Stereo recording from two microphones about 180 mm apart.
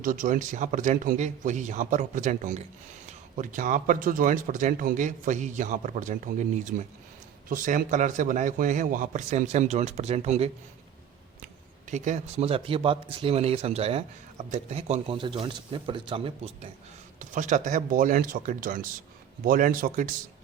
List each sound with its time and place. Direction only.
0.0 s speech: 50° right (ahead or behind)
7.5 s speech: 50° right (ahead or behind)
11.9 s a man's voice: 40° right (ahead or behind)
17.2 s speech: 45° right (ahead or behind)